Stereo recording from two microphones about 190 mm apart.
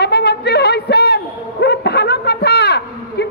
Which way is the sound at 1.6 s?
60° left (ahead or behind).